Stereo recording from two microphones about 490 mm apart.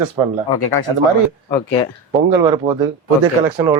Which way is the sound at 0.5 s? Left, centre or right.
Left.